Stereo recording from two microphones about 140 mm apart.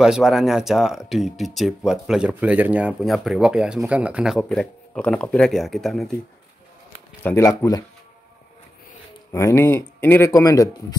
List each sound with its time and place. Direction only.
0.0 s speech: 5° right (ahead or behind)
7.2 s speech: 20° left (ahead or behind)
9.3 s speech: 20° left (ahead or behind)